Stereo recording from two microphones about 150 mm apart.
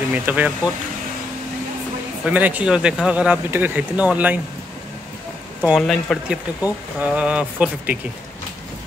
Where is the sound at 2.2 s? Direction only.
10° right (ahead or behind).